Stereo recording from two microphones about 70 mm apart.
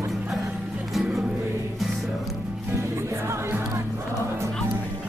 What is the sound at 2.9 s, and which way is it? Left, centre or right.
Music, right.